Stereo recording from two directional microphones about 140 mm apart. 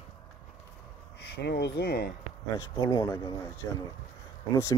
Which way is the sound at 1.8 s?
90° left.